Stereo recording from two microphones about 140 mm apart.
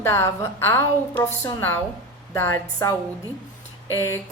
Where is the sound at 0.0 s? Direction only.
20° left (ahead or behind).